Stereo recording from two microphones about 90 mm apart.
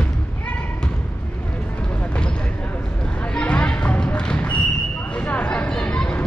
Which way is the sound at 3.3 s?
15° left (ahead or behind).